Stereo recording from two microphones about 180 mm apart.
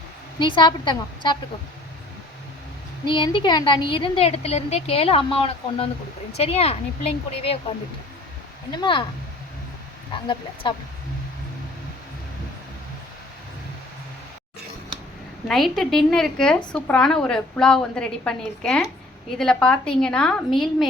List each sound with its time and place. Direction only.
0.3 s a woman's voice: 25° left (ahead or behind)
3.1 s a woman's voice: 25° left (ahead or behind)
8.7 s a woman's voice: 25° left (ahead or behind)
10.1 s a woman's voice: 25° left (ahead or behind)
15.4 s a woman's voice: centre (ahead or behind)